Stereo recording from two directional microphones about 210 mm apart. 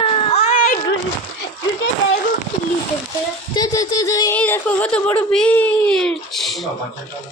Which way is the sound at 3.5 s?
15° left (ahead or behind).